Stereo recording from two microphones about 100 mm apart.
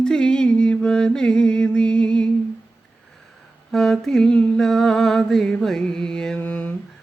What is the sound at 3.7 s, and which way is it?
Mantra, 5° left (ahead or behind).